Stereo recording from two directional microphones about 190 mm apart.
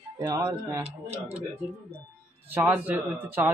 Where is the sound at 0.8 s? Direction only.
35° right (ahead or behind).